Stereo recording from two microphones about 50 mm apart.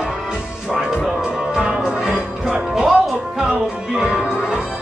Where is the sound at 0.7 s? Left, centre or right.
Centre.